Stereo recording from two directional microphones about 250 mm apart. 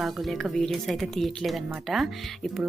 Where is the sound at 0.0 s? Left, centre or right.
Centre.